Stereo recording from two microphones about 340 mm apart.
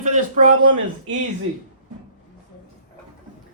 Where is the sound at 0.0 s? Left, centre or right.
Right.